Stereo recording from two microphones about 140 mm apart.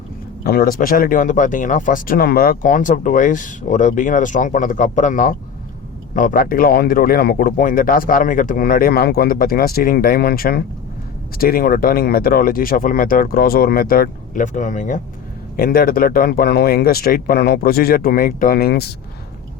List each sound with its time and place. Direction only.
0.5 s speech: 90° left; by 5.3 s 65° left (ahead or behind)
6.1 s speech: 80° left; by 15.0 s 60° left (ahead or behind)
15.5 s speech: 90° left